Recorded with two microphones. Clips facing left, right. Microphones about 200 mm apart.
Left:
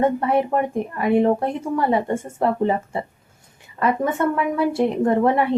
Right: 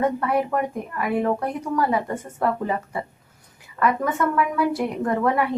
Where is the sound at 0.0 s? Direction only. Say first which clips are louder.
Left 3 dB; 25° left (ahead or behind).